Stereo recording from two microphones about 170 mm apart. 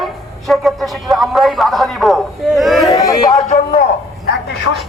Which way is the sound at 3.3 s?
45° left (ahead or behind).